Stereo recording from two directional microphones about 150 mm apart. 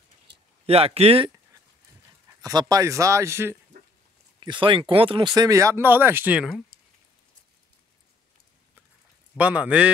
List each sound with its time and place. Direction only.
0.7 s speech: 40° right (ahead or behind)
2.7 s speech: 20° right (ahead or behind)
4.4 s speech: 30° right (ahead or behind); by 6.6 s 5° right (ahead or behind)
9.4 s a man's voice: 10° right (ahead or behind)